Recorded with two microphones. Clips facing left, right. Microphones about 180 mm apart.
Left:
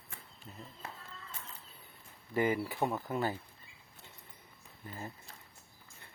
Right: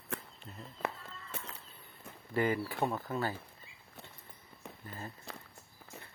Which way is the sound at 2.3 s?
15° left (ahead or behind).